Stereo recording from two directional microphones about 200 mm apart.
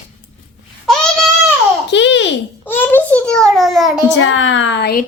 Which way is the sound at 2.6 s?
10° left (ahead or behind).